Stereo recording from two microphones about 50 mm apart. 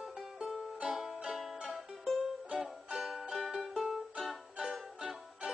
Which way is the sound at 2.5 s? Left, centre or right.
Centre.